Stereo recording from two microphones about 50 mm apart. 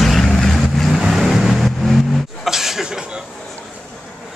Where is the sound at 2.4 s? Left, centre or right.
Centre.